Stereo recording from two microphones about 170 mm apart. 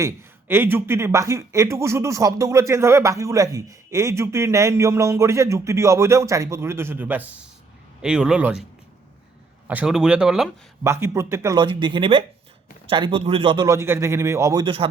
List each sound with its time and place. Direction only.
0.0 s speech: 15° right (ahead or behind)
9.6 s speech: 5° right (ahead or behind)
10.8 s speech: 15° right (ahead or behind)
11.6 s speech: 30° right (ahead or behind)
13.7 s speech: 15° right (ahead or behind)